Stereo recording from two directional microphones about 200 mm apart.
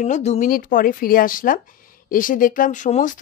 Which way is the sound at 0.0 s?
35° left (ahead or behind).